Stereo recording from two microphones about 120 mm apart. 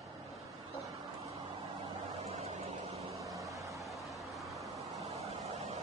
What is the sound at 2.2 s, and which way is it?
Vehicle, 60° right (ahead or behind).